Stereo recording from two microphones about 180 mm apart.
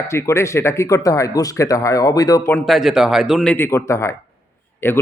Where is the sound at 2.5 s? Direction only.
Centre (ahead or behind).